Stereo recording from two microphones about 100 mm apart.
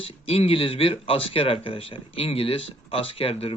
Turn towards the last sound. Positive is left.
turn(degrees=70)  # may be behind; listen again after turning